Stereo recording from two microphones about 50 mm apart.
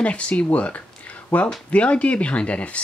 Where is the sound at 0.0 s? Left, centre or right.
Left.